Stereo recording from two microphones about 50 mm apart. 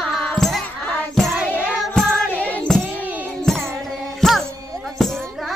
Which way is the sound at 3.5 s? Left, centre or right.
Centre.